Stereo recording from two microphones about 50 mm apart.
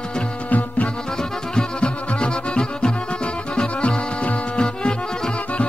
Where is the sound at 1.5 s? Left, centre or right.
Centre.